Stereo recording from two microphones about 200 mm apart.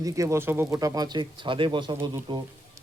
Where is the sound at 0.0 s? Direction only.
15° right (ahead or behind).